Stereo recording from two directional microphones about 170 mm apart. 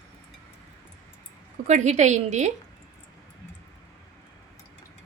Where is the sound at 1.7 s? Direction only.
45° right (ahead or behind).